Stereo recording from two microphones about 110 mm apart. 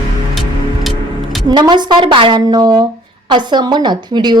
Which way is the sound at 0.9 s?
Centre (ahead or behind).